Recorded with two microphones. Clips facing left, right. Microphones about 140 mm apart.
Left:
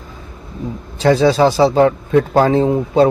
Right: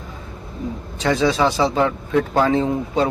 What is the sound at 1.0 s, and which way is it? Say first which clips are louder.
Speech: left 6 dB; 35° left (ahead or behind).